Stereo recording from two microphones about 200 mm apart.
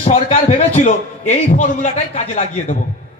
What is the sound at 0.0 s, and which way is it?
A man's voice, 35° left (ahead or behind).